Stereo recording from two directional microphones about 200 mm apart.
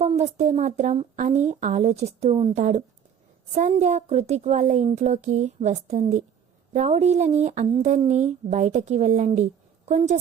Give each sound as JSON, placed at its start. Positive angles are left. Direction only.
{"t": 0.0, "sound": "speech", "side_deg": -35}